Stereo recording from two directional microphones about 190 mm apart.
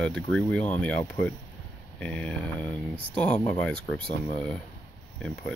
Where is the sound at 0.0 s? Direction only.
5° left (ahead or behind).